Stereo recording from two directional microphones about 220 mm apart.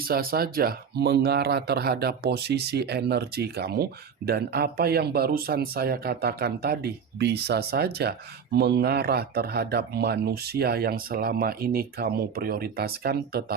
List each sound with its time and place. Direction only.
0.0 s speech: 40° right (ahead or behind)